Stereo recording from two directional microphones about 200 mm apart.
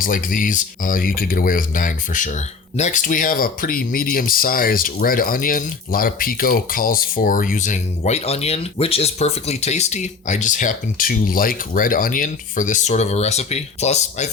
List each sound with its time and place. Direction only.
0.0 s speech: 45° left (ahead or behind)